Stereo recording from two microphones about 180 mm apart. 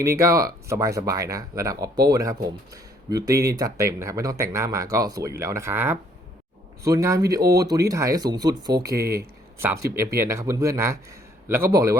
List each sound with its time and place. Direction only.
0.0 s speech: 15° right (ahead or behind)